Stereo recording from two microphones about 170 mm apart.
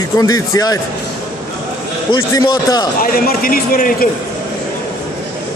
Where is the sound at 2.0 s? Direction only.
25° left (ahead or behind).